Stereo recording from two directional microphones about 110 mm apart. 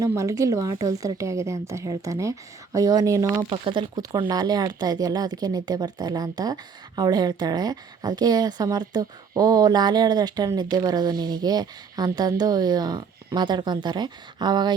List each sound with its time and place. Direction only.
0.2 s a woman's voice: 30° right (ahead or behind)
3.5 s speech: 50° right (ahead or behind)